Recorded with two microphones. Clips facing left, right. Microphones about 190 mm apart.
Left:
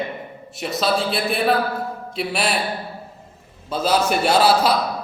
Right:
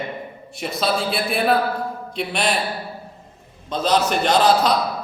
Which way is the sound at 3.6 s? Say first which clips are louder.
Even; 5° left (ahead or behind).